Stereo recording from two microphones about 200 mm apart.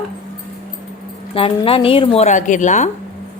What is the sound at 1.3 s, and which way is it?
Speech, 25° left (ahead or behind).